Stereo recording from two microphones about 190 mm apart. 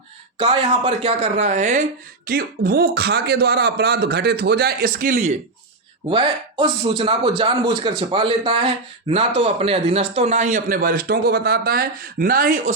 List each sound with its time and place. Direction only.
0.3 s speech: 30° right (ahead or behind)
6.1 s a man's voice: 25° right (ahead or behind); by 12.7 s 50° right (ahead or behind)